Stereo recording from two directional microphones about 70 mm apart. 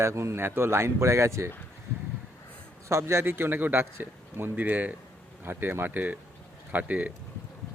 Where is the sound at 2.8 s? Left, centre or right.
Right.